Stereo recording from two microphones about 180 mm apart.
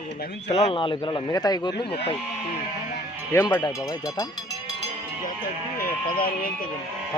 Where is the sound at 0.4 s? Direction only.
35° left (ahead or behind).